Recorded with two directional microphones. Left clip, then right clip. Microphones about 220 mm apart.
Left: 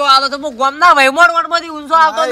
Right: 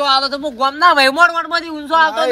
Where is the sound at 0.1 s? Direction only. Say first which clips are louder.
Left 4 dB; 25° left (ahead or behind).